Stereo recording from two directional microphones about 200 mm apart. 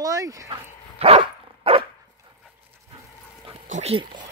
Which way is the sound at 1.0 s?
30° right (ahead or behind).